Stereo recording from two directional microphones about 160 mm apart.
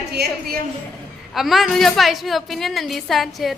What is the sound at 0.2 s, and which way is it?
Speech, 75° right (ahead or behind).